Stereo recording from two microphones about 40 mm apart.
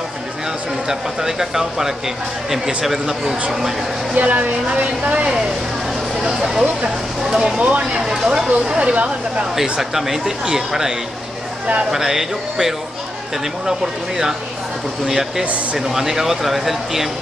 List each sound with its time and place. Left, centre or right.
0.8 s speech: centre
4.1 s speech: right
6.2 s speech: centre
7.5 s speech: right
8.0 s speech: centre
8.7 s speech: right
9.6 s speech: centre